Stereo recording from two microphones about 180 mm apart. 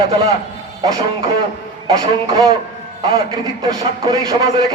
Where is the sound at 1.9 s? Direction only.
20° right (ahead or behind).